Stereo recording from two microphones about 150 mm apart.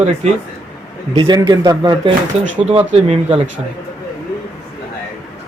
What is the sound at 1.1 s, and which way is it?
A man's voice, 30° right (ahead or behind).